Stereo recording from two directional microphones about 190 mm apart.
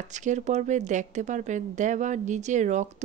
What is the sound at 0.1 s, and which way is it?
A woman's voice, 40° right (ahead or behind).